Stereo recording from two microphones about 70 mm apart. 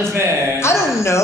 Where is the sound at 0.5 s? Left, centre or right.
Left.